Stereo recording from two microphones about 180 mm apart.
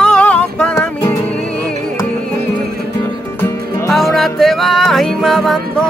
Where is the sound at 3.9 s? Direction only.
Centre (ahead or behind).